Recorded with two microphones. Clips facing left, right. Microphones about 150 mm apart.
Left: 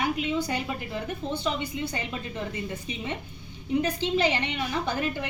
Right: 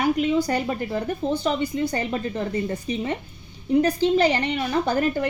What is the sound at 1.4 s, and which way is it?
A woman's voice, 40° right (ahead or behind).